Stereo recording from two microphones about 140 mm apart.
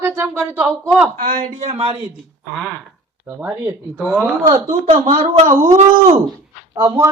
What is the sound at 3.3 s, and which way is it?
A woman's voice, 10° right (ahead or behind).